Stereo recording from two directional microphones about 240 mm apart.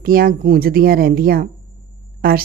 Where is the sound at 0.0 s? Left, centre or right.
Right.